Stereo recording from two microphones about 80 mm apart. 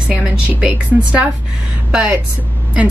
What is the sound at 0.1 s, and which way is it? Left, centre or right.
A woman's voice, centre.